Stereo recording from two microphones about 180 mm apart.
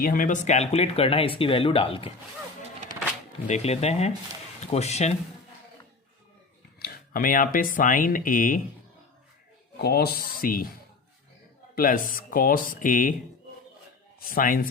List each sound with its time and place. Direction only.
0.0 s speech: 50° left (ahead or behind); by 2.1 s 30° left (ahead or behind)
3.4 s speech: 40° left (ahead or behind)
6.7 s speech: 55° left (ahead or behind)
9.7 s speech: 60° left (ahead or behind)
11.7 s speech: 50° left (ahead or behind)
14.3 s speech: 50° left (ahead or behind)